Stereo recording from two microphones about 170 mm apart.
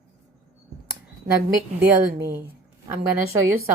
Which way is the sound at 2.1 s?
15° right (ahead or behind).